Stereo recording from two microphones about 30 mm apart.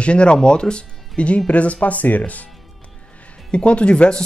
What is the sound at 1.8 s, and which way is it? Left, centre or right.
Speech, left.